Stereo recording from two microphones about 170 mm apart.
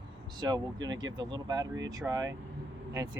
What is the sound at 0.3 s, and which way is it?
Speech, 25° right (ahead or behind).